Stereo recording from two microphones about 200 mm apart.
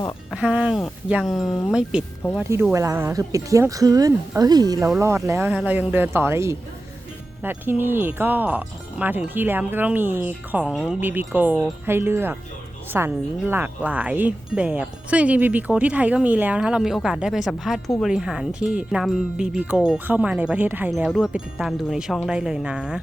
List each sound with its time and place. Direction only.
0.3 s speech: 5° right (ahead or behind)